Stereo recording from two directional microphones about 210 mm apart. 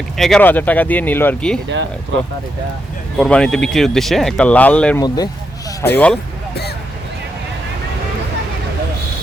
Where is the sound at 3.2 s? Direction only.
5° left (ahead or behind).